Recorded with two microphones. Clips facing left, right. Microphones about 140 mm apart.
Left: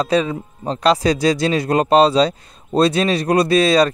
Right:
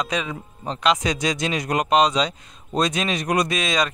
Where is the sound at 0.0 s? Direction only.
35° left (ahead or behind).